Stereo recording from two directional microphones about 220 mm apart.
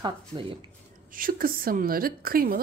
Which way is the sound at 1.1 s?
40° right (ahead or behind).